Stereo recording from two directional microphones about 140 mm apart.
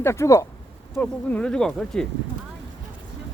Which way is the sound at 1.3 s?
5° left (ahead or behind).